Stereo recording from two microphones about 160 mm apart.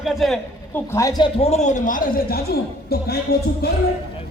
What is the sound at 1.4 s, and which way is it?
A man's voice, 45° left (ahead or behind).